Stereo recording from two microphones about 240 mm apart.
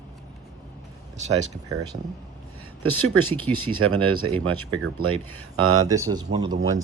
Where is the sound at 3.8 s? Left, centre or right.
Right.